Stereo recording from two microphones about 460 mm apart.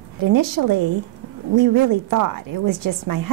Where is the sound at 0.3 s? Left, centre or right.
Right.